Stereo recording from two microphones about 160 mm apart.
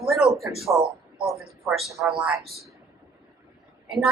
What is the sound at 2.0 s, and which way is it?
Speech, 5° right (ahead or behind).